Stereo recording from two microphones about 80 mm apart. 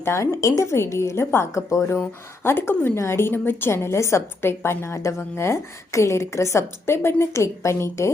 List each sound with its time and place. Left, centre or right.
0.0 s a woman's voice: left